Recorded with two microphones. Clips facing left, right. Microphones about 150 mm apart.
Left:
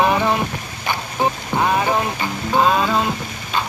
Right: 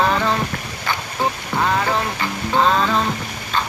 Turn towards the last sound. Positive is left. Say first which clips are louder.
# left 1 dB
turn(degrees=10)  # may be behind; listen again after turning